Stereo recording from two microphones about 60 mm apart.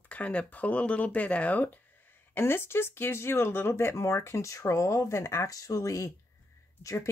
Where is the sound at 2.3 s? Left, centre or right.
Left.